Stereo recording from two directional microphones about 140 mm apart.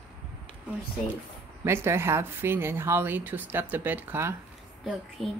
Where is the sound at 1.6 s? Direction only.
15° right (ahead or behind).